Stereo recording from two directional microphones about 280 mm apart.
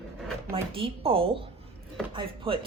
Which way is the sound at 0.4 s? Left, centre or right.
Centre.